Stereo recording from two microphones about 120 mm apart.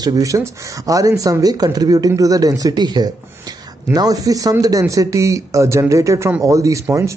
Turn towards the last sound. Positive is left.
turn(degrees=-25)  # may be behind; listen again after turning